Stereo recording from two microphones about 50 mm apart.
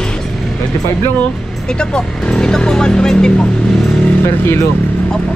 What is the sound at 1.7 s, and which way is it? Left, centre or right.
Speech, centre.